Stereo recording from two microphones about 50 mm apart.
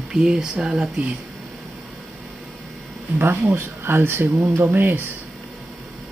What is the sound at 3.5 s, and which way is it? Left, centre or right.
Speech, right.